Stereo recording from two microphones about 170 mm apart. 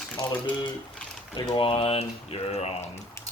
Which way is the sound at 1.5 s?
30° left (ahead or behind).